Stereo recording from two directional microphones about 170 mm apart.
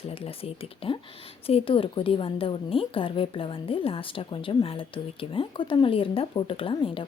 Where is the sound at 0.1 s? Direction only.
35° left (ahead or behind).